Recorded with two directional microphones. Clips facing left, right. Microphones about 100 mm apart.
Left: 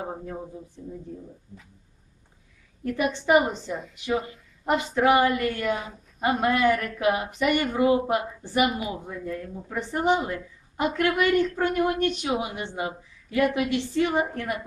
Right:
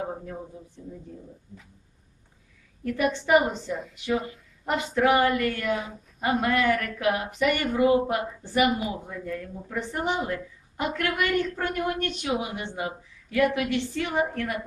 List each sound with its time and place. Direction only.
2.8 s a woman's voice: 20° left (ahead or behind)